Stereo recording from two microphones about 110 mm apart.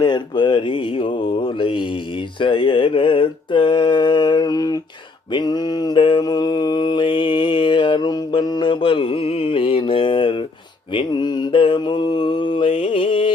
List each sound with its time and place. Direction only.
0.0 s speech: 45° left (ahead or behind)
2.4 s mantra: 50° left (ahead or behind)
12.7 s music: 60° left (ahead or behind)